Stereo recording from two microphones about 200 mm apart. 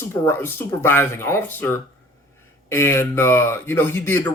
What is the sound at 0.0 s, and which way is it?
Speech, 10° left (ahead or behind).